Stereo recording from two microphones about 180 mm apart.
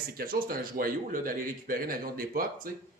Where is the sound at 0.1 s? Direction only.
55° right (ahead or behind).